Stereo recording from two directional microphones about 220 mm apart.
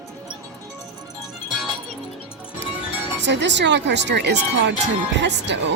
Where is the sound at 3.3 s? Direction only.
55° right (ahead or behind).